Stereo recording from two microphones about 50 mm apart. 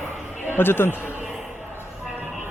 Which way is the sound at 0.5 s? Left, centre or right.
Left.